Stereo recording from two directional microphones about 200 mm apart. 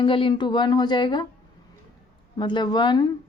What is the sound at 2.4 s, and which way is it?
Speech, 20° left (ahead or behind).